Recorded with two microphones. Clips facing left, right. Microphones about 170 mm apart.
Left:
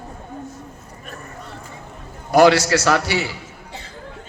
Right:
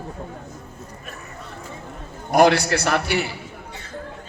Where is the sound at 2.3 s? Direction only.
90° left.